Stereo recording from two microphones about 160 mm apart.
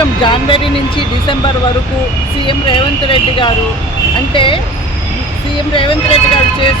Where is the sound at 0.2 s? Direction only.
30° left (ahead or behind).